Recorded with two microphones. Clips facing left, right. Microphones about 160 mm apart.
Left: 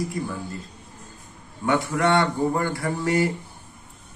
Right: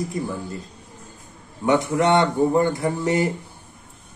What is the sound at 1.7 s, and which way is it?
Speech, 20° right (ahead or behind).